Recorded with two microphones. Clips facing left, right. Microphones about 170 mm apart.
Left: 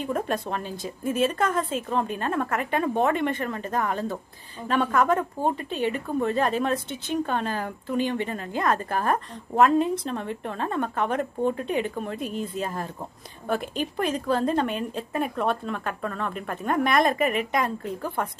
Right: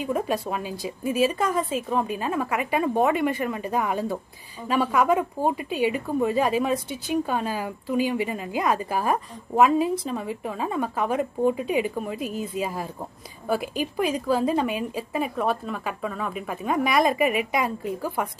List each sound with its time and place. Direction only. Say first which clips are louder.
0.0 s a woman's voice: right 2 dB; 5° right (ahead or behind)